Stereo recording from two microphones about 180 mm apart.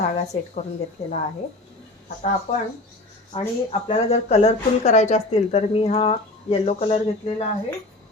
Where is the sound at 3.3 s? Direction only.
30° left (ahead or behind).